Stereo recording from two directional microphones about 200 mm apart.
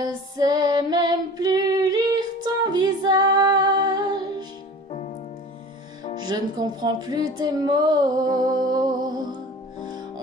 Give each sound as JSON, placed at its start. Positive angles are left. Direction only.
{"t": 0.0, "sound": "female singing", "side_deg": -20}
{"t": 6.2, "sound": "speech", "side_deg": -20}